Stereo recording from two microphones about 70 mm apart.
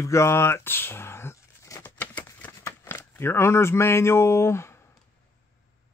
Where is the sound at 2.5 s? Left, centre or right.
Left.